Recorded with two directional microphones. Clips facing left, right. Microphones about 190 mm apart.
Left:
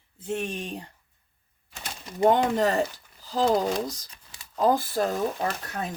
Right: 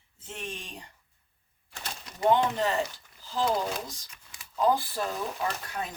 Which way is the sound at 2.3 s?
40° left (ahead or behind).